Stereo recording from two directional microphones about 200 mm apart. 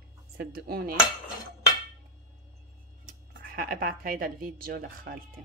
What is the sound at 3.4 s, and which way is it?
Speech, 45° right (ahead or behind).